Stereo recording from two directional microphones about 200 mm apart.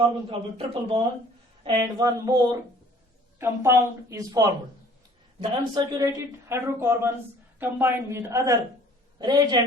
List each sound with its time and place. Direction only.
0.3 s a man's voice: 30° right (ahead or behind)
1.6 s a woman's voice: 20° right (ahead or behind)